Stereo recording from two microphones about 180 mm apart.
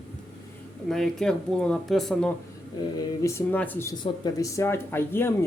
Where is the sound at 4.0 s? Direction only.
20° left (ahead or behind).